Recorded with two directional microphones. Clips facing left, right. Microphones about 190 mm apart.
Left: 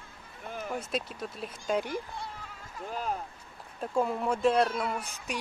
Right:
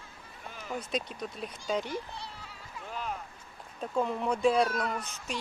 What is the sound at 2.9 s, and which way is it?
Speech, 40° left (ahead or behind).